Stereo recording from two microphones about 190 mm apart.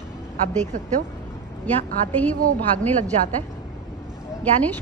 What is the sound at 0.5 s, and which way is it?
Speech, 40° right (ahead or behind).